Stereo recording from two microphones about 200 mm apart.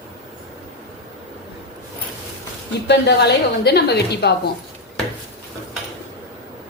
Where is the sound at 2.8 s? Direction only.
55° left (ahead or behind).